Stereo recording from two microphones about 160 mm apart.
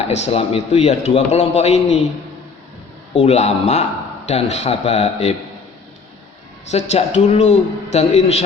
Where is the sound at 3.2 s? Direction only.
40° left (ahead or behind).